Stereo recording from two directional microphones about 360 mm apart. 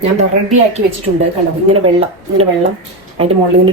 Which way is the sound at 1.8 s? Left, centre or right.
Centre.